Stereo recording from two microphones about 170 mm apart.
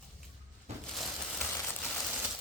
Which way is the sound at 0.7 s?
40° right (ahead or behind).